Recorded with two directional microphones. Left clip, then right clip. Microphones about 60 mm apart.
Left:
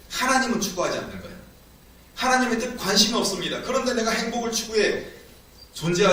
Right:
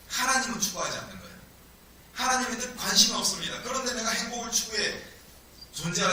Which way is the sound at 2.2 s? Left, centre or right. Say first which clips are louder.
Left 6 dB; right.